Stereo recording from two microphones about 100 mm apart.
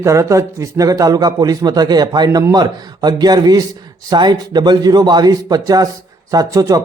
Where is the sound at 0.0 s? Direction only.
30° right (ahead or behind).